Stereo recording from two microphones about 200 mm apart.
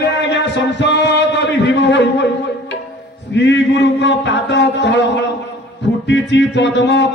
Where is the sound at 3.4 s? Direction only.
60° left (ahead or behind).